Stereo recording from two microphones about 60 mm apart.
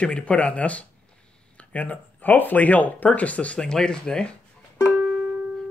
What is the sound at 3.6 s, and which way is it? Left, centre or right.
Speech, centre.